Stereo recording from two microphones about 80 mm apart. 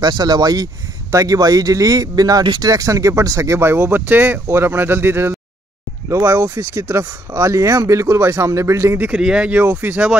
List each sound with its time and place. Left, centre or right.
0.0 s speech: right
2.4 s speech: right
2.7 s speech: right
9.0 s speech: centre